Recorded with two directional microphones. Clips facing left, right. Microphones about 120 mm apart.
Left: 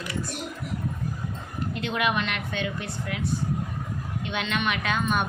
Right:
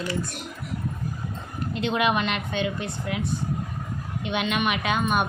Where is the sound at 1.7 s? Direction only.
25° right (ahead or behind).